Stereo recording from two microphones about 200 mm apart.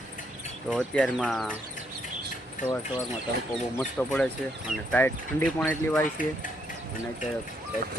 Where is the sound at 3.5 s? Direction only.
5° left (ahead or behind).